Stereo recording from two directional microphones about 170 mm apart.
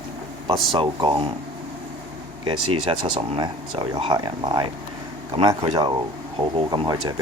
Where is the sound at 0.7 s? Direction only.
30° right (ahead or behind).